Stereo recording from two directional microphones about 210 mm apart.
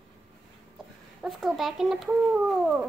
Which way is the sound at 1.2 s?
Centre (ahead or behind).